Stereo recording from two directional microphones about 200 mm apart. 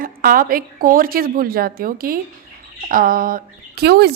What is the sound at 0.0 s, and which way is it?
A woman's voice, 45° right (ahead or behind).